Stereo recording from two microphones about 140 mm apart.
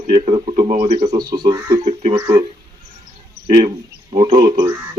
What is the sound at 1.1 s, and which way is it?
Speech, 30° right (ahead or behind).